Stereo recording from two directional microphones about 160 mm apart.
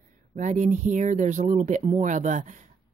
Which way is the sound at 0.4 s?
50° right (ahead or behind).